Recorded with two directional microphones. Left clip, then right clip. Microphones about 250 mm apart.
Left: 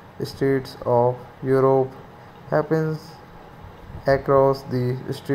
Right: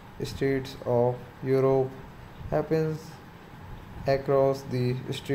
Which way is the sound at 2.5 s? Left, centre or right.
Centre.